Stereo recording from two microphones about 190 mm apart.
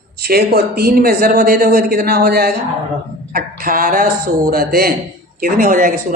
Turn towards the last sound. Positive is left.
turn(degrees=-45)  # may be behind; listen again after turning